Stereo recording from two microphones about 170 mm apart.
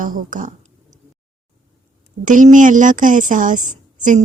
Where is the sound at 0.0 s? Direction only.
50° right (ahead or behind).